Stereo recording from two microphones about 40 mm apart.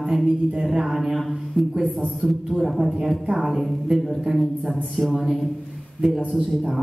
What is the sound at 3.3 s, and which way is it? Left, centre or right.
Speech, centre.